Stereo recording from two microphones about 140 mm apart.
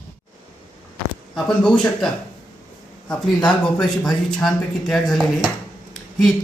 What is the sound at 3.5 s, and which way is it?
Speech, 5° left (ahead or behind).